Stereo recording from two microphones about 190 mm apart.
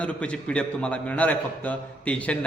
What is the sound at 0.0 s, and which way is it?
A man's voice, 5° left (ahead or behind).